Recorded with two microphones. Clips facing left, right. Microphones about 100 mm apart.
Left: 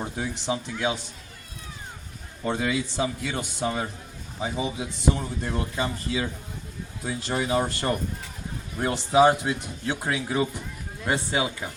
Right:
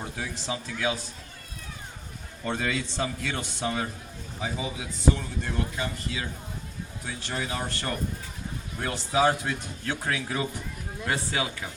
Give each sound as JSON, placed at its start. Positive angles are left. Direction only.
{"t": 0.4, "sound": "speech", "side_deg": 20}
{"t": 2.4, "sound": "speech", "side_deg": 10}
{"t": 4.4, "sound": "speech", "side_deg": 20}